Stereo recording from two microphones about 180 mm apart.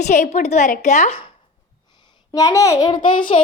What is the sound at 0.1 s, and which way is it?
A woman's voice, 45° left (ahead or behind).